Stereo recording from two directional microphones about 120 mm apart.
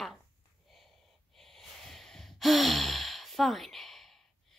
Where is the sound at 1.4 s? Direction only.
5° left (ahead or behind).